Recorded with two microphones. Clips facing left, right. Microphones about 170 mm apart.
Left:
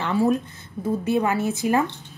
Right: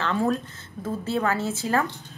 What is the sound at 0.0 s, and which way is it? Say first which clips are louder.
A woman's voice: left 3 dB; 15° left (ahead or behind).